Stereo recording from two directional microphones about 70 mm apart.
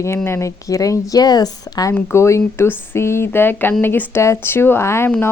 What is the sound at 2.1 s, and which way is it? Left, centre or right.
A woman's voice, left.